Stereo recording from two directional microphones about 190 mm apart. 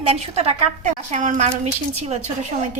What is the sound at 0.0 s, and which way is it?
A woman's voice, 30° right (ahead or behind).